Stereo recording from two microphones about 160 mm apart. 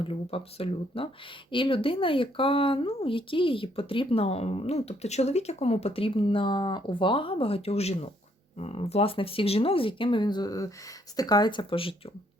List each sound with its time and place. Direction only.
0.0 s speech: 35° left (ahead or behind)